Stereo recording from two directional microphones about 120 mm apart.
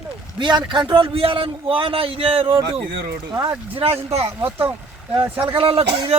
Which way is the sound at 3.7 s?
55° right (ahead or behind).